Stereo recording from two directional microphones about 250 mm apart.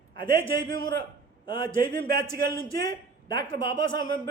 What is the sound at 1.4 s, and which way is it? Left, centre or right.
Speech, centre.